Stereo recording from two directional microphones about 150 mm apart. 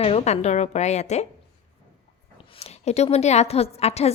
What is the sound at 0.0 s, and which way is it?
A woman's voice, 45° left (ahead or behind).